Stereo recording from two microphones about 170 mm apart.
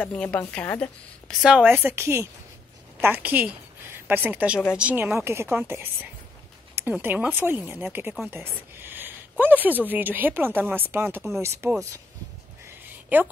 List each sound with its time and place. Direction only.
0.0 s a woman's voice: 5° left (ahead or behind)
1.4 s a woman's voice: 5° right (ahead or behind)
13.1 s a woman's voice: 10° right (ahead or behind)